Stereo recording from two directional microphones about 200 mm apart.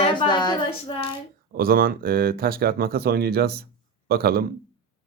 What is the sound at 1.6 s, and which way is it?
Speech, 45° right (ahead or behind).